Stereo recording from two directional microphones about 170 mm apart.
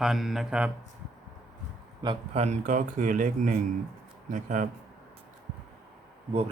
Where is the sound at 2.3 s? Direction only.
40° right (ahead or behind).